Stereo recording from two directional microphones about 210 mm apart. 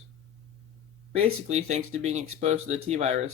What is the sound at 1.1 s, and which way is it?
Speech, 30° right (ahead or behind).